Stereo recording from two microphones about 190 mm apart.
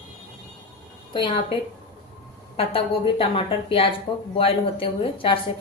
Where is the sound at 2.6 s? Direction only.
30° left (ahead or behind).